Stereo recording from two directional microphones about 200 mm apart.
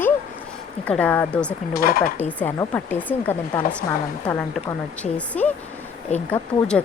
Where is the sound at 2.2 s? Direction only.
10° left (ahead or behind).